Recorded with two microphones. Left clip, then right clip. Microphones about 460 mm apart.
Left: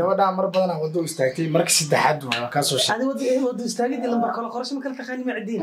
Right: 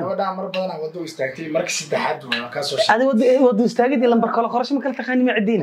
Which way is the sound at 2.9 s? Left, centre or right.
Right.